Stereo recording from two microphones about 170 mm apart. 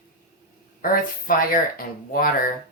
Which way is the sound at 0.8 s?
55° left (ahead or behind).